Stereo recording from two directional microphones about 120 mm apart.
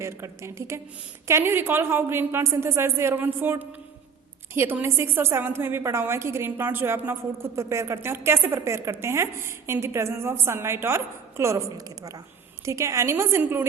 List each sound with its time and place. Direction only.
0.0 s a woman's voice: 20° right (ahead or behind)